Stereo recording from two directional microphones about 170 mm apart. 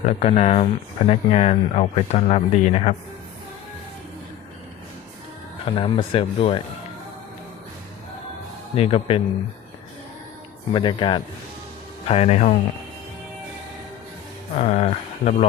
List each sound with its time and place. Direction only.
0.0 s speech: 40° left (ahead or behind)
5.7 s speech: 30° left (ahead or behind)
8.7 s speech: 35° left (ahead or behind)
10.7 s speech: 30° left (ahead or behind)
12.0 s speech: 40° left (ahead or behind)
14.5 s speech: 40° left (ahead or behind)